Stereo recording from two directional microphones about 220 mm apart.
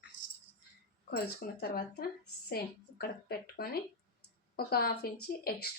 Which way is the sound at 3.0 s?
45° left (ahead or behind).